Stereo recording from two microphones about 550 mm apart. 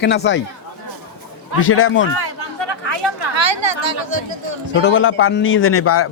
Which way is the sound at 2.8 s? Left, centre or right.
Right.